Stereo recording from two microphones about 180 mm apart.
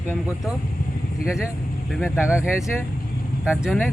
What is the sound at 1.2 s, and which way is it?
A man's voice, 5° right (ahead or behind).